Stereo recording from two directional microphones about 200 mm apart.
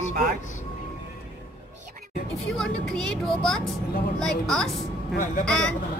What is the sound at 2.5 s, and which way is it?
Speech, 5° left (ahead or behind).